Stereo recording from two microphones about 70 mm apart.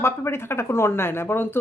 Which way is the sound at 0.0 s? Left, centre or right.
Left.